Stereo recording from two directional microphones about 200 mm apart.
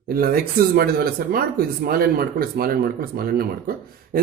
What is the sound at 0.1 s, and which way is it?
Speech, 45° right (ahead or behind).